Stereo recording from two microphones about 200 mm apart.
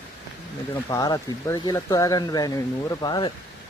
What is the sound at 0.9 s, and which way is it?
Speech, 15° left (ahead or behind).